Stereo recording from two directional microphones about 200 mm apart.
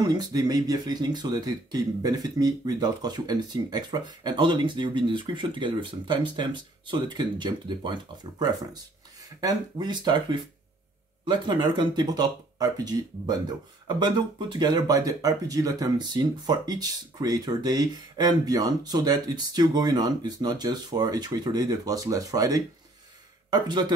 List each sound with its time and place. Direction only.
0.0 s speech: 20° right (ahead or behind)
11.2 s speech: 20° right (ahead or behind)